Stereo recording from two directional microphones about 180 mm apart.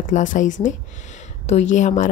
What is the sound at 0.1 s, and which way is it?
A woman's voice, 45° left (ahead or behind).